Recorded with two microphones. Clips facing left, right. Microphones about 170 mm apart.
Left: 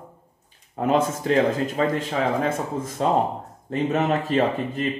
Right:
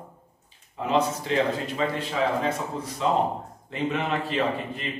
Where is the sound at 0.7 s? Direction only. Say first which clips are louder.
Left 3 dB; 50° left (ahead or behind).